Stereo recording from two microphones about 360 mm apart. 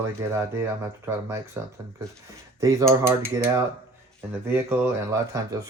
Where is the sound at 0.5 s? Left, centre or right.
Centre.